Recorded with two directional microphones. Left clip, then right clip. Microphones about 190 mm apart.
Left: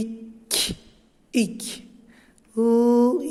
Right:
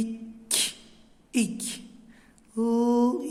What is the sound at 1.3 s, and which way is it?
Mantra, 25° left (ahead or behind).